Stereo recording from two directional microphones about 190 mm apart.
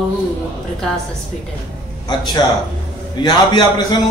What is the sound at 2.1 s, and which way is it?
A man's voice, 20° left (ahead or behind).